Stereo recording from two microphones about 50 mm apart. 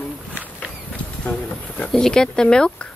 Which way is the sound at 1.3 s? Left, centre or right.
Left.